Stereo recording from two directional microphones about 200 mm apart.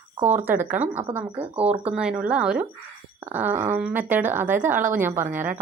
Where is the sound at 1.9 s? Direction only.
5° right (ahead or behind).